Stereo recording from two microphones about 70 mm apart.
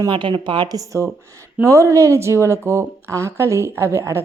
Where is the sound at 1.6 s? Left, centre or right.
Right.